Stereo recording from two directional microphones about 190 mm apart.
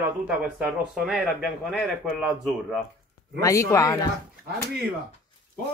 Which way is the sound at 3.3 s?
15° left (ahead or behind).